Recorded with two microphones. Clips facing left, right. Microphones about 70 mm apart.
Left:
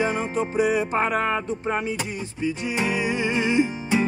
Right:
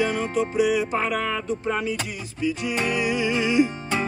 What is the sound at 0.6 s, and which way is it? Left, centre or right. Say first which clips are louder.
Music: left 1 dB; left.